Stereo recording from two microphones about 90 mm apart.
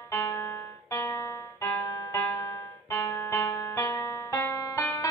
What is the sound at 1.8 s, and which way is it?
Music, 40° left (ahead or behind).